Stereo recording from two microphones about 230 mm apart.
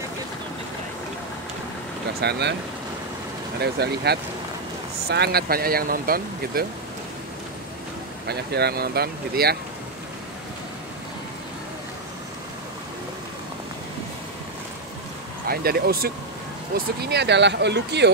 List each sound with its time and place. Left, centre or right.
2.1 s speech: right
3.6 s speech: right
8.3 s speech: right
15.4 s speech: right